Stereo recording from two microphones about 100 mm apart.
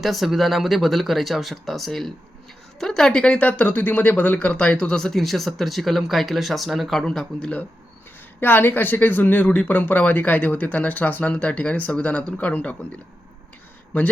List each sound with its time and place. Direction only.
0.0 s speech: centre (ahead or behind)
8.4 s speech: 20° left (ahead or behind)